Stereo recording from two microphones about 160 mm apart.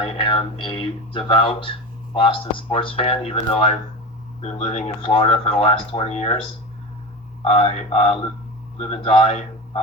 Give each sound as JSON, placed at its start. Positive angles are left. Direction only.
{"t": 0.0, "sound": "speech", "side_deg": 30}
{"t": 7.4, "sound": "speech", "side_deg": 40}